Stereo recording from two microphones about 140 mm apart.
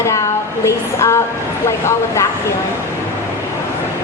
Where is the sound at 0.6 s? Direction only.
20° left (ahead or behind).